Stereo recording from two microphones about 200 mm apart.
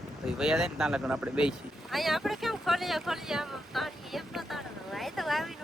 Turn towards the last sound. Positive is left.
turn(degrees=0)  # may be behind; listen again after turning